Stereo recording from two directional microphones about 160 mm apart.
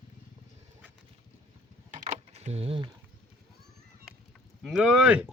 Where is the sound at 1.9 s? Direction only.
50° right (ahead or behind); by 2.9 s 35° right (ahead or behind).